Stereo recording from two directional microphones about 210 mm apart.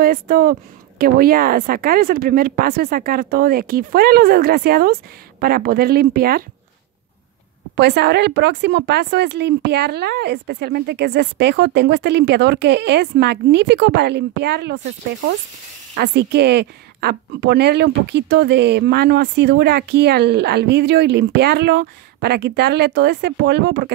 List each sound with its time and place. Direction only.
0.0 s a woman's voice: 45° right (ahead or behind)
7.7 s a woman's voice: 50° right (ahead or behind)
16.0 s a woman's voice: 55° right (ahead or behind)